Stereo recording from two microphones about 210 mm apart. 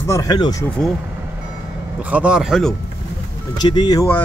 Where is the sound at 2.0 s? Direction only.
5° right (ahead or behind).